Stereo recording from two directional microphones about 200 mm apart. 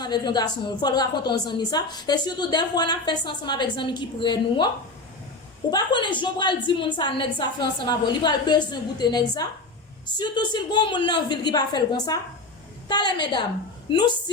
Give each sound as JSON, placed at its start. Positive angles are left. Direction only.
{"t": 0.0, "sound": "a woman's voice", "side_deg": 20}
{"t": 5.7, "sound": "a woman's voice", "side_deg": 20}